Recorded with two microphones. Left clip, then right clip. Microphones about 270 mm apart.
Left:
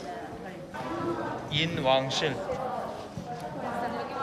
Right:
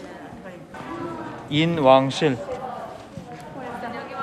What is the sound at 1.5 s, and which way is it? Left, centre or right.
Speech, centre.